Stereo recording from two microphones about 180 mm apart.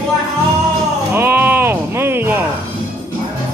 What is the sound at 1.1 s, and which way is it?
Speech, 15° right (ahead or behind).